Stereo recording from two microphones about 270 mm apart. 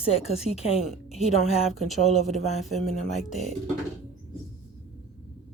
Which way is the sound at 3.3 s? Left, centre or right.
Left.